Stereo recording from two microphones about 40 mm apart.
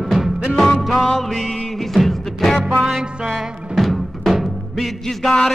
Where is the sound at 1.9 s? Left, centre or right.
Centre.